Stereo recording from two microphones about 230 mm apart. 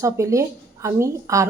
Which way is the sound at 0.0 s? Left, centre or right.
Centre.